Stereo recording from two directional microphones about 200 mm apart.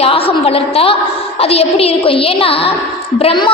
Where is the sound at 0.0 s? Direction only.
30° left (ahead or behind).